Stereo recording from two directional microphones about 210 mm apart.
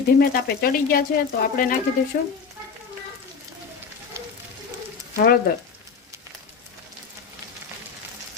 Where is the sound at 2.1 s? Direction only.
45° left (ahead or behind).